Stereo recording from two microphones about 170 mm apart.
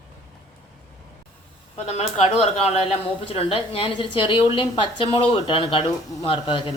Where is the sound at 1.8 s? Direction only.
40° left (ahead or behind).